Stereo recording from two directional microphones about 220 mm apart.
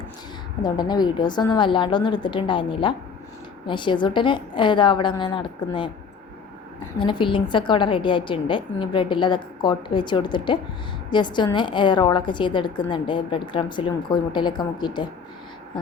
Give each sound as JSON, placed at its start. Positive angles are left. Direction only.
{"t": 0.6, "sound": "a woman's voice", "side_deg": 20}
{"t": 7.0, "sound": "a woman's voice", "side_deg": 20}